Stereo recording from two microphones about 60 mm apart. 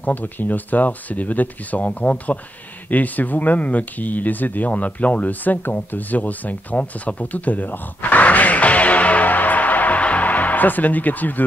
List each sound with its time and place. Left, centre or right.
0.0 s speech: left